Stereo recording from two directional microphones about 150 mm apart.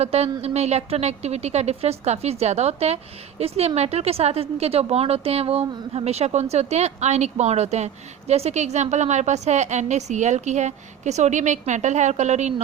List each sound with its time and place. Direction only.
0.0 s a woman's voice: 45° right (ahead or behind)